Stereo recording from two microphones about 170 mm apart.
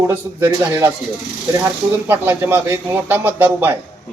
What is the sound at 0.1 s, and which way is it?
A man's voice, 10° right (ahead or behind).